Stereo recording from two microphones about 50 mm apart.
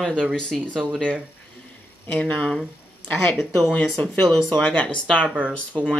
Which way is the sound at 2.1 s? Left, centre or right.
Centre.